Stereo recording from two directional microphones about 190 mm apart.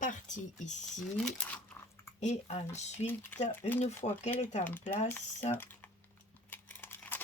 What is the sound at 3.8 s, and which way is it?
Speech, 35° left (ahead or behind).